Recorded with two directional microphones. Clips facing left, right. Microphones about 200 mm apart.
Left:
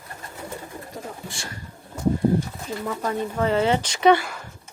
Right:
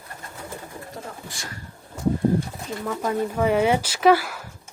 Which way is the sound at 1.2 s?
30° left (ahead or behind).